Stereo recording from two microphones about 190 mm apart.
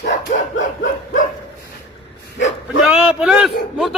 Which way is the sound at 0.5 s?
90° left.